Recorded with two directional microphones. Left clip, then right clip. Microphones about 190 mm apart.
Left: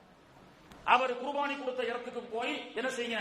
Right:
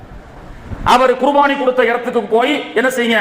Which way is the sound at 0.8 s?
50° right (ahead or behind).